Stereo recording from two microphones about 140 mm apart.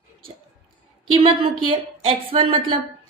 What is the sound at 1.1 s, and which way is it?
A woman's voice, 40° right (ahead or behind).